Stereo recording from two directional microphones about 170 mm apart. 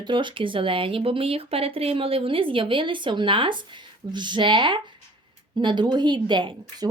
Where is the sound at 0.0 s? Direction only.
30° right (ahead or behind).